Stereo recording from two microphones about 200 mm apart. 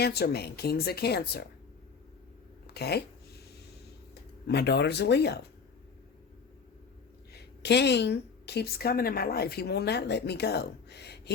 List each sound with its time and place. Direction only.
0.0 s a woman's voice: 55° left (ahead or behind)
2.7 s speech: 55° left (ahead or behind)
4.1 s speech: 55° left (ahead or behind)
7.3 s speech: 55° left (ahead or behind)